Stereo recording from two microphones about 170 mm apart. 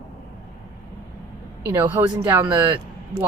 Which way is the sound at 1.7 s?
10° right (ahead or behind).